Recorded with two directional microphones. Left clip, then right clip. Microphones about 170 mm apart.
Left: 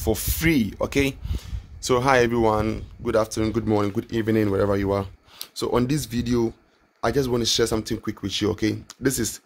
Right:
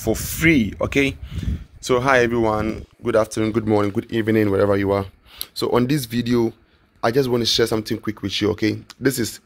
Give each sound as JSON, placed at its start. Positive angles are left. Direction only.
{"t": 0.0, "sound": "speech", "side_deg": -10}
{"t": 3.0, "sound": "speech", "side_deg": -15}